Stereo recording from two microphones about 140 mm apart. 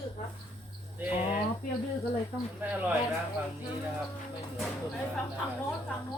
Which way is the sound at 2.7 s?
10° right (ahead or behind).